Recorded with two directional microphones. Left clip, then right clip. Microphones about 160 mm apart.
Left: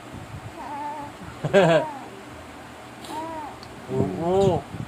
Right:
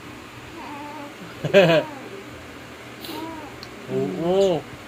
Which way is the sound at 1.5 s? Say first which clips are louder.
Right 2 dB; 50° left (ahead or behind).